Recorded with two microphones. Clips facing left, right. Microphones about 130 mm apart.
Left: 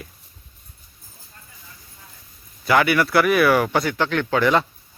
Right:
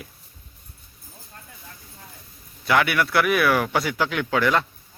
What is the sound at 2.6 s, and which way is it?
Speech, centre (ahead or behind).